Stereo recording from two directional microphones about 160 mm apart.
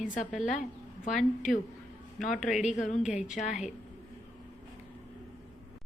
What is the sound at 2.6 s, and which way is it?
Speech, 50° left (ahead or behind).